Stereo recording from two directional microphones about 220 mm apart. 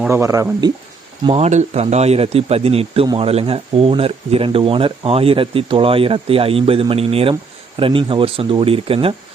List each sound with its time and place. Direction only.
0.0 s speech: 15° right (ahead or behind)
1.2 s speech: 30° right (ahead or behind)